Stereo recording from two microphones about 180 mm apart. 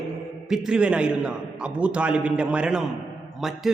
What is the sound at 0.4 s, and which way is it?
A man's voice, 5° right (ahead or behind).